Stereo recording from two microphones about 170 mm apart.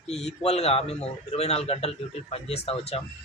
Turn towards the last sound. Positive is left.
turn(degrees=35)  # may be behind; listen again after turning